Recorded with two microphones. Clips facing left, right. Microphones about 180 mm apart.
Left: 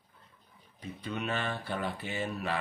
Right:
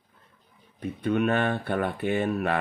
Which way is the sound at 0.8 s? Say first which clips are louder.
Right 12 dB; 55° right (ahead or behind).